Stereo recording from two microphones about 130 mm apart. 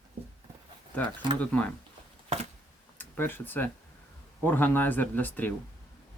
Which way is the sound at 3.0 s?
15° left (ahead or behind).